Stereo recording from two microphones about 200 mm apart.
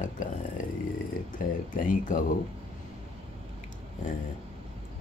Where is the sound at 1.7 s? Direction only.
40° left (ahead or behind).